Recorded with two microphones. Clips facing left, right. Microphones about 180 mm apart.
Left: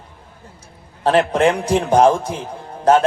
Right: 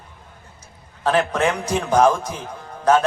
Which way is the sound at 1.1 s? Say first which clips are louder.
Left 4 dB; 30° left (ahead or behind).